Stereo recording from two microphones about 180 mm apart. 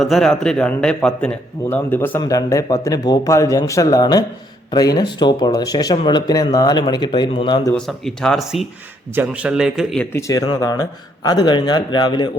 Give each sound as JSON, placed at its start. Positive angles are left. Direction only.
{"t": 0.0, "sound": "a man's voice", "side_deg": 0}
{"t": 7.7, "sound": "speech", "side_deg": 5}
{"t": 10.1, "sound": "a man's voice", "side_deg": 15}